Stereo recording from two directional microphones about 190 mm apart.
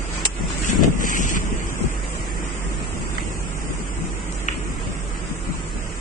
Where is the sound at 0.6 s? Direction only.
45° left (ahead or behind).